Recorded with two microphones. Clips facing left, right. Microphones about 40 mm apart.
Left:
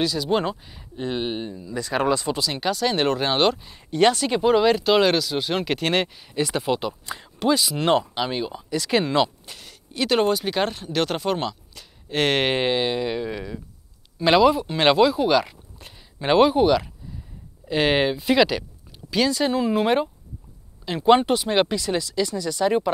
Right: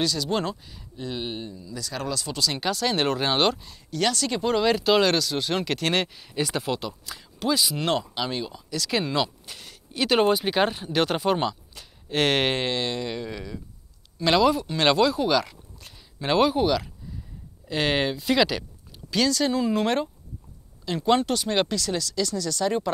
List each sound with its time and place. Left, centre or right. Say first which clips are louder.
0.0 s speech: left 3 dB; centre
0.9 s speech: left 5 dB; left
2.4 s speech: left 2 dB; centre
3.6 s speech: left 7 dB; left
9.5 s speech: even; centre